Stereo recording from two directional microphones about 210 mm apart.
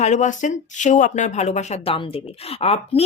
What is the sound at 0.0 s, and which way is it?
Speech, 35° left (ahead or behind).